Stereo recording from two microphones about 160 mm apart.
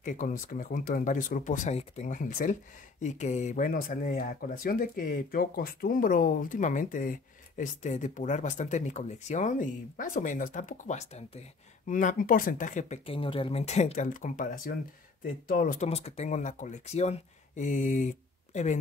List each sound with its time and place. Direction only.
0.0 s speech: 55° left (ahead or behind)
11.9 s speech: 55° left (ahead or behind)